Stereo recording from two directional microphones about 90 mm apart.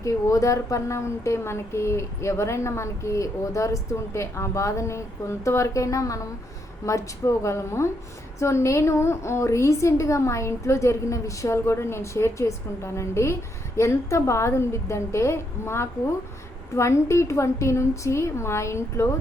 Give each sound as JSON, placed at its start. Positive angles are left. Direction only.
{"t": 0.0, "sound": "speech", "side_deg": 35}